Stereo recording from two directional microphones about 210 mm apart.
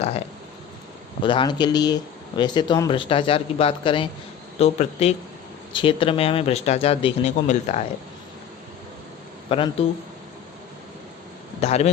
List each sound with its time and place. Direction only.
1.2 s speech: 25° left (ahead or behind)
9.5 s speech: 25° left (ahead or behind)
11.6 s a man's voice: 30° left (ahead or behind)